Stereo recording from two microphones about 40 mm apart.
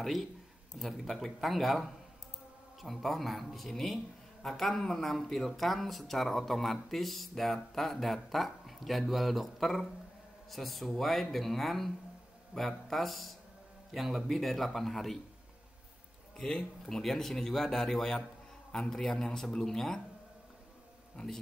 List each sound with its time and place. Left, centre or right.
0.0 s a man's voice: centre
16.3 s speech: left
17.0 s a man's voice: centre